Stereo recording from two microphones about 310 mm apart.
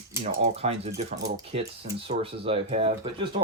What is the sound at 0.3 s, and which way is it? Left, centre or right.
Speech, right.